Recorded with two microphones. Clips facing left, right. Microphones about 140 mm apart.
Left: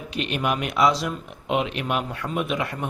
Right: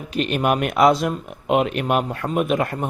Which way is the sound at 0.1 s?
45° right (ahead or behind).